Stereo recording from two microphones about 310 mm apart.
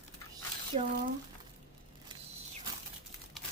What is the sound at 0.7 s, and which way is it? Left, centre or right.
Speech, centre.